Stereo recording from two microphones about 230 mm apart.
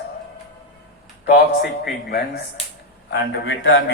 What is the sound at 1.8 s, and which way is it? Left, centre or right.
Speech, left.